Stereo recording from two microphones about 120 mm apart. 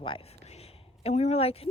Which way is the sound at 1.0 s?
65° left (ahead or behind).